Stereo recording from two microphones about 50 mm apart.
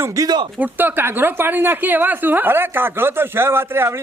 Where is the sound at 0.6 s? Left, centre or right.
Right.